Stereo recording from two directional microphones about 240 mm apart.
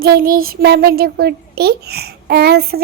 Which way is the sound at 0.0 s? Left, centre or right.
Right.